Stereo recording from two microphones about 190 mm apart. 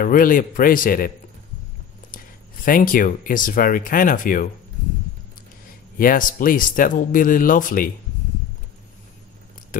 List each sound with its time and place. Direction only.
0.0 s speech: 45° left (ahead or behind)
2.1 s speech: 45° left (ahead or behind)
5.9 s speech: 45° left (ahead or behind)